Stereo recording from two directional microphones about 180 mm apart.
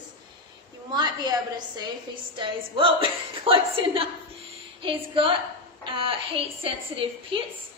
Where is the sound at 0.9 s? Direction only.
25° right (ahead or behind).